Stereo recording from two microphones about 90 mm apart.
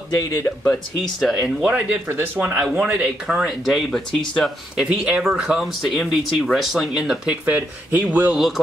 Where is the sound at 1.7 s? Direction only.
20° right (ahead or behind).